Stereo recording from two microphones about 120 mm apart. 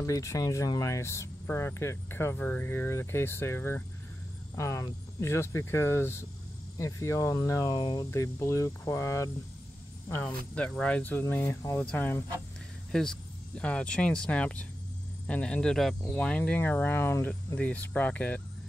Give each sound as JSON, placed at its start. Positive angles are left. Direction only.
{"t": 0.0, "sound": "speech", "side_deg": 25}
{"t": 7.8, "sound": "speech", "side_deg": 40}
{"t": 8.1, "sound": "speech", "side_deg": 25}